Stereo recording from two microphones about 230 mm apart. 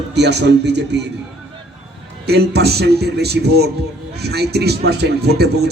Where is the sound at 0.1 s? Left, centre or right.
Right.